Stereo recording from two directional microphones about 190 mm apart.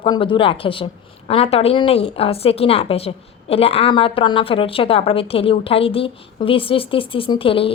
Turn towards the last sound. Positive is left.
turn(degrees=30)  # may be behind; listen again after turning